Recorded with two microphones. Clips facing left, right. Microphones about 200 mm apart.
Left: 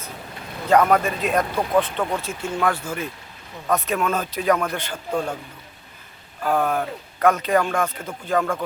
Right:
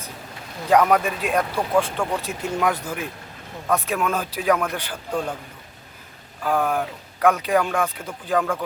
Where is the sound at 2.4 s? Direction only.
15° right (ahead or behind).